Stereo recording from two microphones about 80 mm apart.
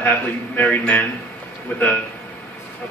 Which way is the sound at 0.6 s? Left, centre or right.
Left.